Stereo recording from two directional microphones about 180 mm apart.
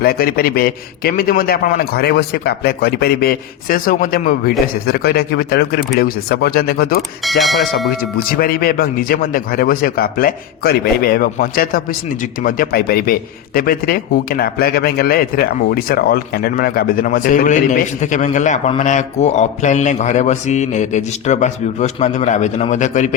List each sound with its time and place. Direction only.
0.0 s a man's voice: 55° left (ahead or behind)
7.3 s speech: centre (ahead or behind)
8.3 s a man's voice: 55° left (ahead or behind)